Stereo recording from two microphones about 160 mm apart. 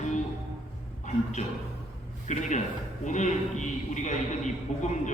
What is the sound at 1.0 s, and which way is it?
A man's voice, 50° left (ahead or behind).